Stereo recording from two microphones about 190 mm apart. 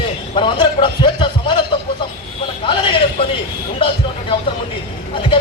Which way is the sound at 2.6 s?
25° left (ahead or behind).